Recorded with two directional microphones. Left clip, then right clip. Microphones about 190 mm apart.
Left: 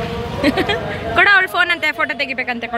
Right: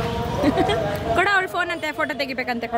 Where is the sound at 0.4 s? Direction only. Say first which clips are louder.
Left 3 dB; centre (ahead or behind).